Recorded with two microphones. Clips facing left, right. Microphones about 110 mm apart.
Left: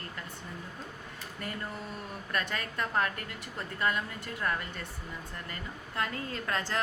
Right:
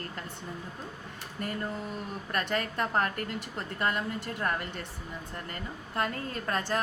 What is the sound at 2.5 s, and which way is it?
A woman's voice, 35° right (ahead or behind).